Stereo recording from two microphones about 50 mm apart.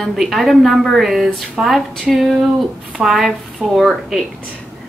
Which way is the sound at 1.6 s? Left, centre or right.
Right.